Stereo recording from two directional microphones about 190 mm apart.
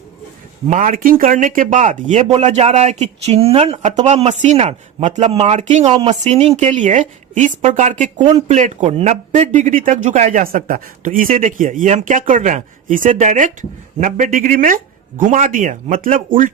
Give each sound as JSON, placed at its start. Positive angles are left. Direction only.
{"t": 0.7, "sound": "speech", "side_deg": -45}